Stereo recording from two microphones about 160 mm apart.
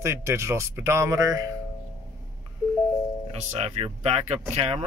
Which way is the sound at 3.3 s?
40° right (ahead or behind).